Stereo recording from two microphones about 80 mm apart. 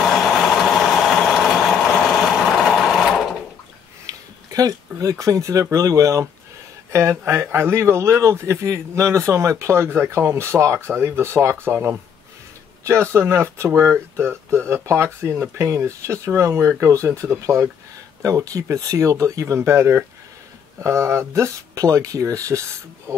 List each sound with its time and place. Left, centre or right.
0.0 s vehicle: centre
4.0 s a sound: right
5.2 s a man's voice: right
12.8 s a man's voice: right
18.2 s a man's voice: right